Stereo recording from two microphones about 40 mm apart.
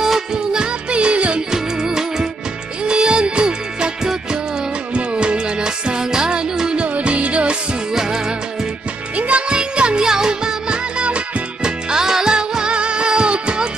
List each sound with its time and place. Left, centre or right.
0.0 s music: centre
0.4 s music: right
1.5 s music: centre
6.8 s music: right
7.9 s music: centre
9.1 s music: right
9.5 s music: right